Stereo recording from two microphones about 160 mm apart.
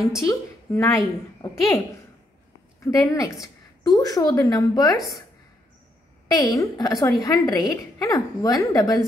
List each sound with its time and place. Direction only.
0.3 s a woman's voice: 20° left (ahead or behind)
2.8 s a woman's voice: 20° left (ahead or behind)
6.2 s a woman's voice: 20° left (ahead or behind)